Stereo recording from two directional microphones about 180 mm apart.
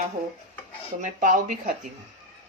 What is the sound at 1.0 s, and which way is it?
Speech, 45° right (ahead or behind).